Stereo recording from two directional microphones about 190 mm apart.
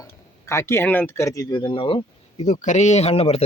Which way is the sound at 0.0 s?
15° left (ahead or behind).